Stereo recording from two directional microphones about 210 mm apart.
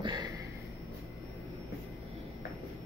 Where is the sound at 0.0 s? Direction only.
20° right (ahead or behind).